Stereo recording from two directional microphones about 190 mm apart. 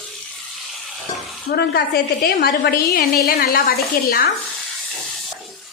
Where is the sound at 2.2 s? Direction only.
55° left (ahead or behind).